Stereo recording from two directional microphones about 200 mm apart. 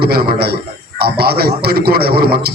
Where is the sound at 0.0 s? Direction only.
50° right (ahead or behind).